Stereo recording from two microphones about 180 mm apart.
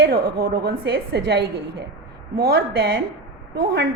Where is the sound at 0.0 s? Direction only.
65° right (ahead or behind).